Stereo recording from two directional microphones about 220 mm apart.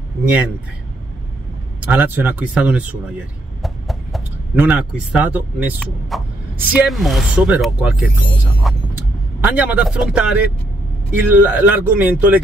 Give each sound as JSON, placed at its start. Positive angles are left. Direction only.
{"t": 1.9, "sound": "speech", "side_deg": -10}